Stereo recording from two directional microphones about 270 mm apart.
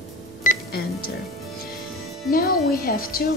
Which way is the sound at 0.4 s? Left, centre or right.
Left.